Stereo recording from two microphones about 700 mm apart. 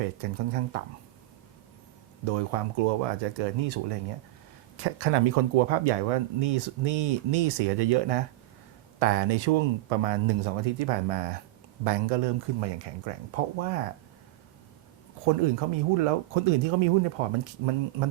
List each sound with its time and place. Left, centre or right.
0.0 s speech: right
2.2 s speech: right
15.2 s speech: right